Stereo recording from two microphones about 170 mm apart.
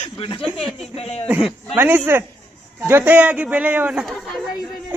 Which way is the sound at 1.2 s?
10° right (ahead or behind).